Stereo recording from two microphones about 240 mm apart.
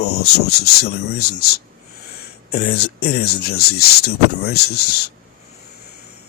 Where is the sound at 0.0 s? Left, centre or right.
Left.